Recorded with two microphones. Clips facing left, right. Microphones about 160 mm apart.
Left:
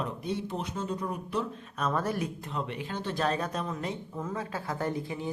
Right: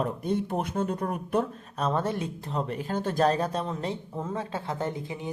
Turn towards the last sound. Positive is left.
turn(degrees=-20)  # may be behind; listen again after turning